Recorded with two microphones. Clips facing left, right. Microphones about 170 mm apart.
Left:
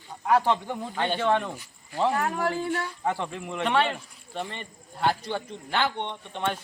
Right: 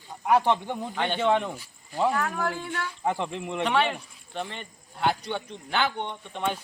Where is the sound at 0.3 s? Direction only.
15° right (ahead or behind).